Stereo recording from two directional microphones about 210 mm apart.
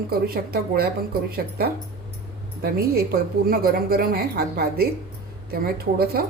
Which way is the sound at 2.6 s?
45° right (ahead or behind).